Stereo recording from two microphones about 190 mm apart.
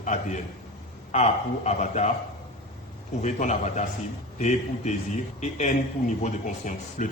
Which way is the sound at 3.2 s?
40° left (ahead or behind).